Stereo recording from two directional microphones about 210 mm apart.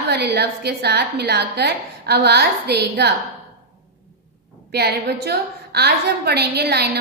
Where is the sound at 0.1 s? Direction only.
50° right (ahead or behind).